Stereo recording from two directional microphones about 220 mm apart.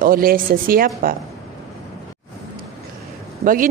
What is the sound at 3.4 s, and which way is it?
Speech, 40° right (ahead or behind).